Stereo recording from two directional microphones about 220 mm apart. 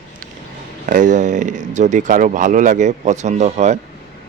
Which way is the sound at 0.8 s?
35° right (ahead or behind).